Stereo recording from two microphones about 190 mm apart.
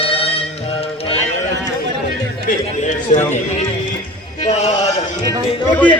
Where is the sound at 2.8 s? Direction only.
40° left (ahead or behind).